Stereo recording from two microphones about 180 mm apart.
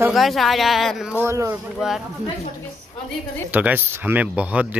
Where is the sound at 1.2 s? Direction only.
15° right (ahead or behind).